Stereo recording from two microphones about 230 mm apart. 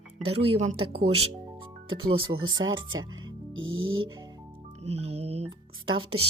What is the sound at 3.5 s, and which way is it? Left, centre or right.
Music, right.